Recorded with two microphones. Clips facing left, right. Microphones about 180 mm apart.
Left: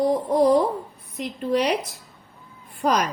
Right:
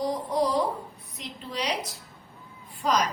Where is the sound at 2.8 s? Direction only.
55° left (ahead or behind).